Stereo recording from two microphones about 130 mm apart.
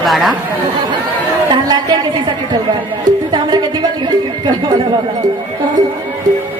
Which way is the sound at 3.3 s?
35° right (ahead or behind).